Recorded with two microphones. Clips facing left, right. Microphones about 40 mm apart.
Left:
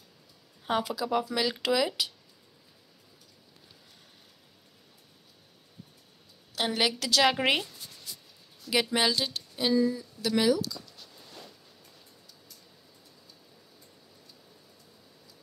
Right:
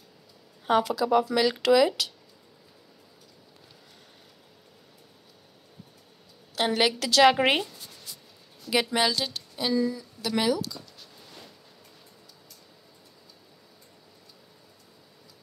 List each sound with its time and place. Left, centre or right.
0.7 s speech: centre
6.5 s speech: centre
8.9 s speech: centre
9.3 s a sound: centre
10.2 s speech: centre
10.6 s a sound: centre